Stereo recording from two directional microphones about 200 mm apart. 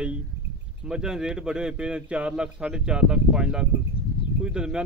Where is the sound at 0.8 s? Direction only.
5° right (ahead or behind).